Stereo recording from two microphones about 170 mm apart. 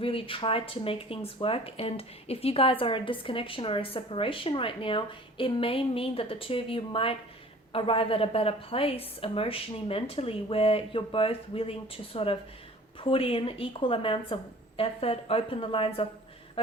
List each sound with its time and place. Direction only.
0.0 s a woman's voice: 30° left (ahead or behind)